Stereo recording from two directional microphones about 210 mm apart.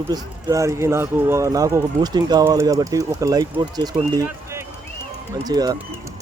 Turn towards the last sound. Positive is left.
turn(degrees=-20)  # may be behind; listen again after turning